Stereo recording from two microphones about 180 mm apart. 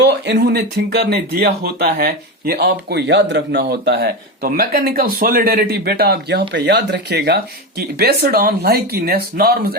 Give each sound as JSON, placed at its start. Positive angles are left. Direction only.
{"t": 0.0, "sound": "speech", "side_deg": -70}